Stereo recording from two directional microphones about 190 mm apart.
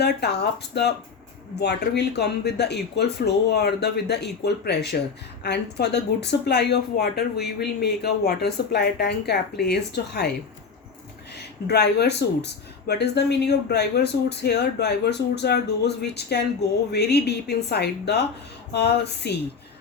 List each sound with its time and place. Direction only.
0.0 s speech: 60° left (ahead or behind)
11.7 s speech: 60° left (ahead or behind)